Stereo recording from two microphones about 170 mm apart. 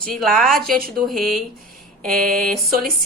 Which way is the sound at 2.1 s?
55° right (ahead or behind).